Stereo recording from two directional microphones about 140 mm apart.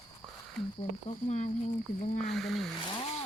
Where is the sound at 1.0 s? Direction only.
55° left (ahead or behind).